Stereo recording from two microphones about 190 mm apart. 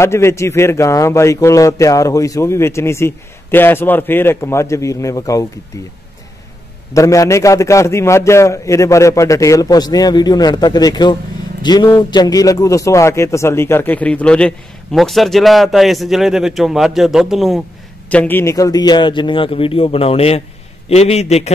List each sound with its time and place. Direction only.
0.0 s a man's voice: 15° left (ahead or behind)
6.9 s a man's voice: 15° left (ahead or behind); by 17.6 s centre (ahead or behind)
18.1 s a man's voice: 10° left (ahead or behind); by 21.5 s 35° left (ahead or behind)